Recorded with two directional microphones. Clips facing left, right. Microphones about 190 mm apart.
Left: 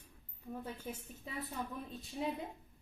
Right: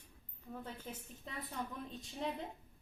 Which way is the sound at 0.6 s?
10° left (ahead or behind).